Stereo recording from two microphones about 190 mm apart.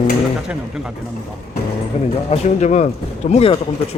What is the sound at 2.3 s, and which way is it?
Speech, 35° left (ahead or behind).